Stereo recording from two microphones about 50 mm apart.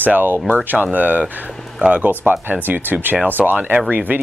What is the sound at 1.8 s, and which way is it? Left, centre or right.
Speech, right.